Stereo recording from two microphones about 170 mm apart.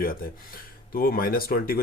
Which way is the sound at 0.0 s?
55° left (ahead or behind).